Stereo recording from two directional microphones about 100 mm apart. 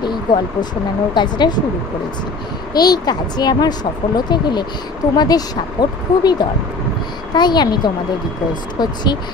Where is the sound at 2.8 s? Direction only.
45° left (ahead or behind).